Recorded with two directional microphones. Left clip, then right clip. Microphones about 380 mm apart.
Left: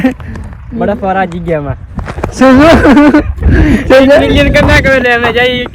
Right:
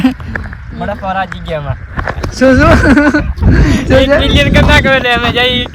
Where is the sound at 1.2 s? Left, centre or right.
Centre.